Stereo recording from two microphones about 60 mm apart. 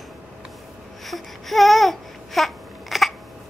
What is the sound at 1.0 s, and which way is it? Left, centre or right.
Babbling, centre.